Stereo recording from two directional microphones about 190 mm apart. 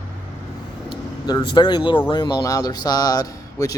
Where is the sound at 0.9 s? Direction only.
25° left (ahead or behind).